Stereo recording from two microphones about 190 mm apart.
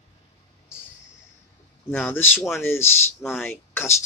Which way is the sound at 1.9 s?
10° left (ahead or behind).